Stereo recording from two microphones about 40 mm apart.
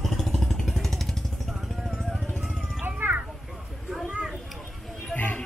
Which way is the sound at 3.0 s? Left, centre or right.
Right.